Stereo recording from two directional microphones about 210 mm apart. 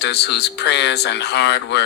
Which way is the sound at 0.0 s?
55° left (ahead or behind).